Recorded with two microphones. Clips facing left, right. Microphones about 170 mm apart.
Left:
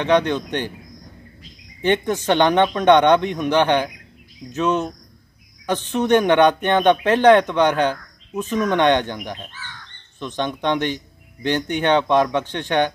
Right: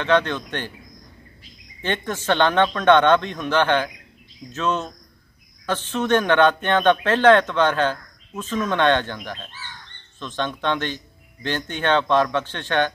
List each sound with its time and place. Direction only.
0.0 s speech: 15° left (ahead or behind)
1.8 s speech: 15° left (ahead or behind)